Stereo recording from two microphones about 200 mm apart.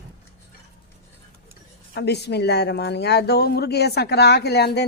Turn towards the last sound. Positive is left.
turn(degrees=55)  # may be behind; listen again after turning